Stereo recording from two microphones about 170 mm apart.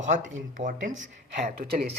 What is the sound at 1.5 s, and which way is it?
Speech, 35° right (ahead or behind).